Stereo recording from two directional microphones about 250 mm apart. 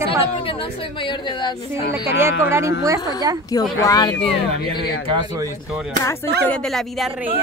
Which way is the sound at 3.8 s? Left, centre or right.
Centre.